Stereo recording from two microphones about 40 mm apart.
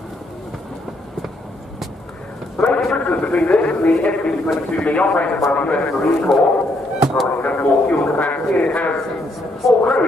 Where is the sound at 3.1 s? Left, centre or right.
Left.